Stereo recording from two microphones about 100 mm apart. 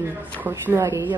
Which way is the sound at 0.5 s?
30° right (ahead or behind).